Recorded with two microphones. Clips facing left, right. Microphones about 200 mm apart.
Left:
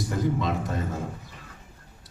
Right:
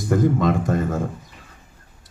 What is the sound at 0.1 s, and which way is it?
Speech, 50° right (ahead or behind).